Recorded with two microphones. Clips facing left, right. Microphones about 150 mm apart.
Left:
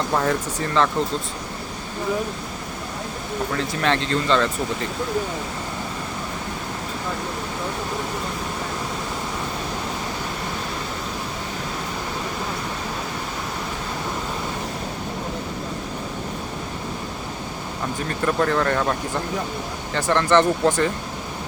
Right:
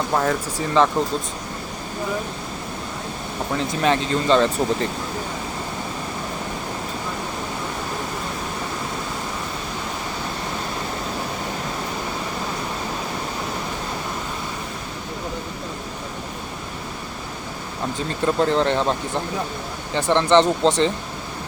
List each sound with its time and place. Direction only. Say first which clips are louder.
0.1 s speech: even; 5° right (ahead or behind)
3.5 s speech: right 3 dB; 20° right (ahead or behind)
18.1 s speech: right 2 dB; 20° right (ahead or behind)